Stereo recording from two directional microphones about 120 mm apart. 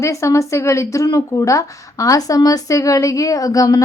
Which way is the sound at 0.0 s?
25° left (ahead or behind).